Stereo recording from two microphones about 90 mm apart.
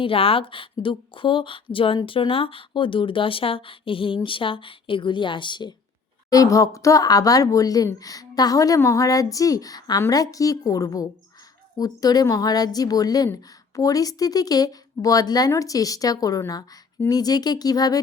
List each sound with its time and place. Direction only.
0.0 s speech: 90° left; by 5.7 s 60° left (ahead or behind)
6.3 s a woman's voice: 40° left (ahead or behind)